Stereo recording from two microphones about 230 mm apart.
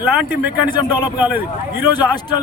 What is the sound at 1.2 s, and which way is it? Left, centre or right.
Speech, centre.